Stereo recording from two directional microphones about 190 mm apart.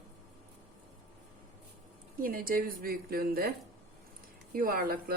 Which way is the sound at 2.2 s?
50° right (ahead or behind).